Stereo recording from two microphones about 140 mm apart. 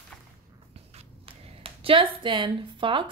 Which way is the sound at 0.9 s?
45° right (ahead or behind).